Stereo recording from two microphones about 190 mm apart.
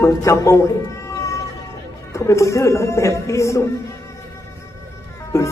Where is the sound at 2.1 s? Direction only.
15° left (ahead or behind).